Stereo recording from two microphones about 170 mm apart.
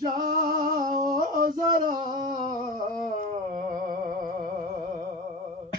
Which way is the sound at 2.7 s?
50° right (ahead or behind).